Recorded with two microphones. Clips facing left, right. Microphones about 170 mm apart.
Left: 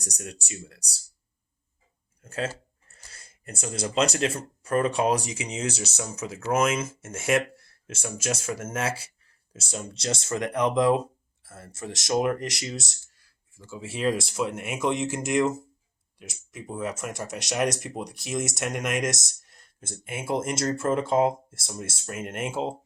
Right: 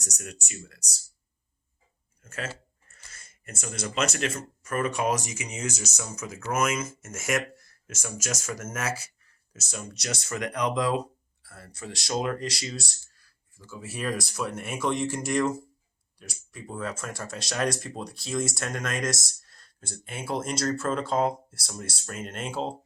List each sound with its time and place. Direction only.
0.0 s speech: 35° left (ahead or behind)
2.2 s speech: 35° left (ahead or behind)
3.1 s a sound: 35° left (ahead or behind)
3.9 s speech: 30° left (ahead or behind)